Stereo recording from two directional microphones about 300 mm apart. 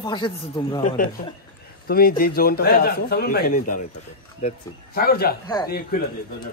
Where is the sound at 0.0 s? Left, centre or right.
Centre.